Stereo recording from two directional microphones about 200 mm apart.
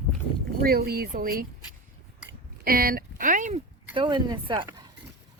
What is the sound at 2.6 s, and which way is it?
Speech, 50° right (ahead or behind).